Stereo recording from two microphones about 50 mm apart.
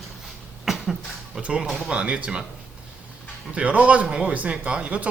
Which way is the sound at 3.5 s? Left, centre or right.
Right.